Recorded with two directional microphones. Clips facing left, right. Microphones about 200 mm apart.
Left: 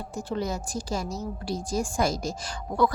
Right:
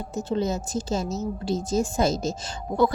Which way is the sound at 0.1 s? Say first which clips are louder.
Right 5 dB; 20° right (ahead or behind).